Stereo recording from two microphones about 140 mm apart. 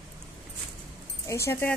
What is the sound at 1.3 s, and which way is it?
Speech, 15° left (ahead or behind).